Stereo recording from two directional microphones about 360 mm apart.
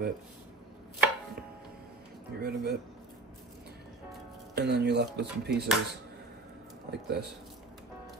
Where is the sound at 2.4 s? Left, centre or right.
Right.